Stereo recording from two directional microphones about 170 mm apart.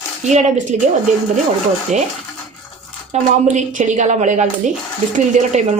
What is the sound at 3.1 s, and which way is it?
A woman's voice, 45° right (ahead or behind).